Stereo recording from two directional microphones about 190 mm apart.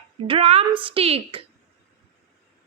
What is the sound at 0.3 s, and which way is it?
A woman's voice, 30° right (ahead or behind).